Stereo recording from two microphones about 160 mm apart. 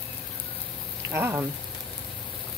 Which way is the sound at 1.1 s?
15° right (ahead or behind).